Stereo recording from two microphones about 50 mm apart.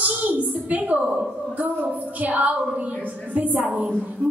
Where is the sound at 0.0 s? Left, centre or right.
Right.